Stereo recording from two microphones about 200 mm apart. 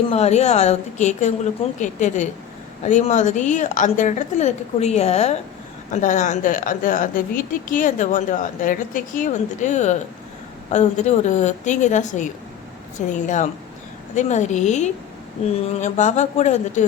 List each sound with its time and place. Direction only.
0.1 s speech: 35° left (ahead or behind)